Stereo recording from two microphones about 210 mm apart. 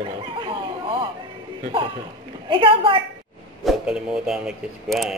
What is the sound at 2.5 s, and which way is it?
Speech, 25° right (ahead or behind).